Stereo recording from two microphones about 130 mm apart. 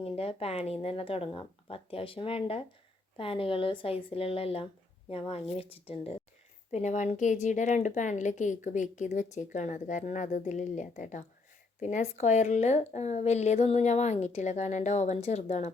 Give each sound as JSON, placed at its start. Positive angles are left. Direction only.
{"t": 0.0, "sound": "speech", "side_deg": 50}
{"t": 6.7, "sound": "a woman's voice", "side_deg": 60}